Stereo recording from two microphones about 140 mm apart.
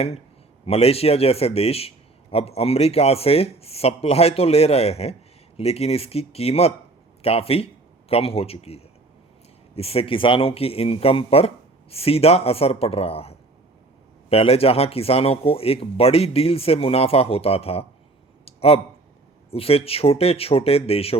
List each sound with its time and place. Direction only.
0.6 s a man's voice: 45° left (ahead or behind)
18.4 s clicking: 45° left (ahead or behind)
19.5 s a man's voice: 45° left (ahead or behind)